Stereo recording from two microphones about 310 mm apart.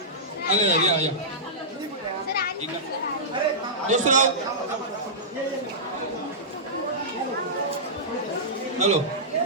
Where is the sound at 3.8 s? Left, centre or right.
Right.